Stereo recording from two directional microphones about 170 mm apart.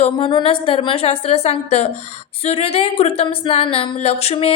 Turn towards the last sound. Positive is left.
turn(degrees=35)  # may be behind; listen again after turning